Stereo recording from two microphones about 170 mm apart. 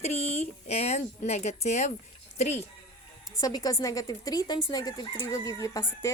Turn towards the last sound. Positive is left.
turn(degrees=20)  # may be behind; listen again after turning